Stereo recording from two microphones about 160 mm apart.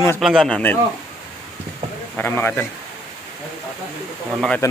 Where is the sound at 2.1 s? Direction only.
15° left (ahead or behind).